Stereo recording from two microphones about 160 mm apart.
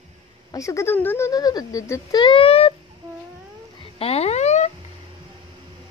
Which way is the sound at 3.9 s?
40° left (ahead or behind).